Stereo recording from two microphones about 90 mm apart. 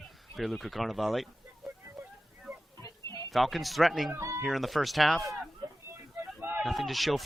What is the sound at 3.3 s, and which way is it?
Speech, centre (ahead or behind).